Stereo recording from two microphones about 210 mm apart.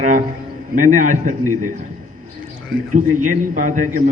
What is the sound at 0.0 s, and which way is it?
A man's voice, 40° right (ahead or behind).